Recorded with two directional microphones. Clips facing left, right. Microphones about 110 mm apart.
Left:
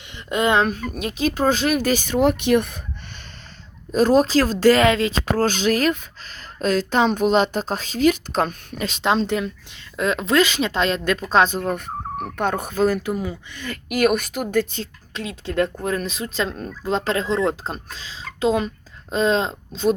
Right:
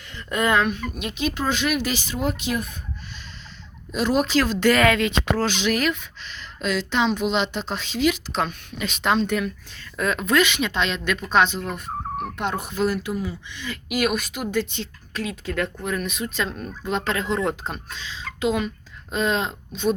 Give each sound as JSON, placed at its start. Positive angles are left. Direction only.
{"t": 0.2, "sound": "speech", "side_deg": 20}
{"t": 3.9, "sound": "speech", "side_deg": 40}
{"t": 8.9, "sound": "speech", "side_deg": 30}
{"t": 15.1, "sound": "speech", "side_deg": 25}